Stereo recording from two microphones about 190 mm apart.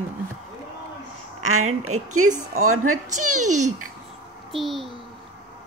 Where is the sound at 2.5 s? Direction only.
90° right.